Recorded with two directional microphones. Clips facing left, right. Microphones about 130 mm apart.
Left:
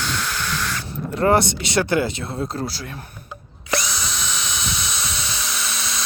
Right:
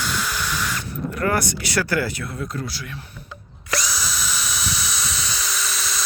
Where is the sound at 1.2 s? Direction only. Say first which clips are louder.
Left 6 dB; 25° left (ahead or behind).